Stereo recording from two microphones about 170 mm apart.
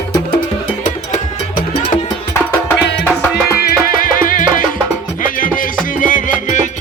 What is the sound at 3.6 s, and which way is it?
Music, 60° left (ahead or behind).